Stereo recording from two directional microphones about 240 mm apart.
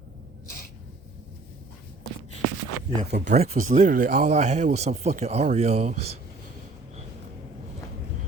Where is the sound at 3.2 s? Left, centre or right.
Right.